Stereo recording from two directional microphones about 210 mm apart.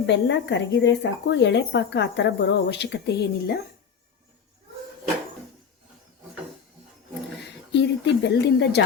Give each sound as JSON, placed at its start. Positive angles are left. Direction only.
{"t": 0.0, "sound": "speech", "side_deg": 55}
{"t": 7.7, "sound": "speech", "side_deg": 55}